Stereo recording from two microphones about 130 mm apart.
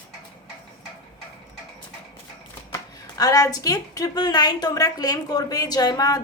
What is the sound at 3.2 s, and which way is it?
A woman's voice, 25° left (ahead or behind).